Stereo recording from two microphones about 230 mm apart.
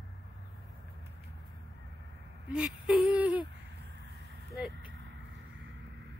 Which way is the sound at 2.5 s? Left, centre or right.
Centre.